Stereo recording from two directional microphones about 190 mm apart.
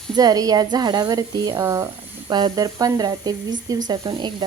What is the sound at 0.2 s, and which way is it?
Speech, 20° right (ahead or behind).